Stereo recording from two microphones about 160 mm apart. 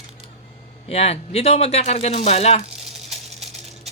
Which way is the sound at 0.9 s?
40° left (ahead or behind).